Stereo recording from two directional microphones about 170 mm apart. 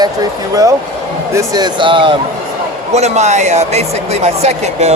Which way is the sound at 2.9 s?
40° right (ahead or behind).